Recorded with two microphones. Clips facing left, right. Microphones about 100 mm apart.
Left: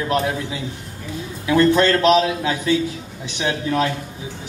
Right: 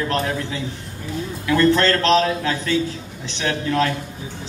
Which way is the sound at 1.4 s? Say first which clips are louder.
Left 1 dB; 15° left (ahead or behind).